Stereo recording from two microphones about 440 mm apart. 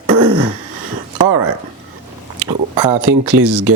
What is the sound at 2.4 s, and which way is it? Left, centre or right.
Speech, centre.